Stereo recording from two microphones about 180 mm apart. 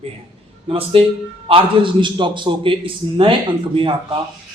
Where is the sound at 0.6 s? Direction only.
30° right (ahead or behind).